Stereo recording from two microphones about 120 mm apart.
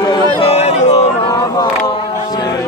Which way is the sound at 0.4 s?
60° left (ahead or behind).